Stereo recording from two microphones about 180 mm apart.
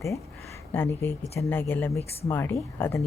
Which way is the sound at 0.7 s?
15° left (ahead or behind).